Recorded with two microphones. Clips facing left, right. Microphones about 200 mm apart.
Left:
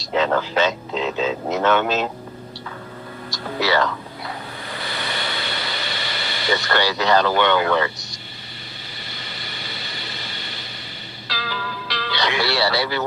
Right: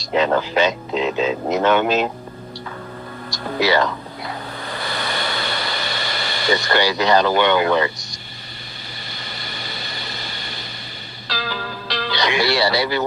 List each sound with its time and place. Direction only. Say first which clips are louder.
0.0 s speech: right 2 dB; 15° right (ahead or behind)
3.6 s speech: right 2 dB; 15° right (ahead or behind)
4.8 s a sound: right 3 dB; 45° right (ahead or behind)
6.5 s speech: right 2 dB; 15° right (ahead or behind)
9.2 s a sound: right 4 dB; 40° right (ahead or behind)
11.3 s music: right 2 dB; 40° right (ahead or behind)
12.1 s speech: right 3 dB; 15° right (ahead or behind)